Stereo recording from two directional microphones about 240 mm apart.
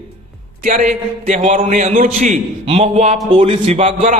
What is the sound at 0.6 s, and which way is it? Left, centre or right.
A man's voice, right.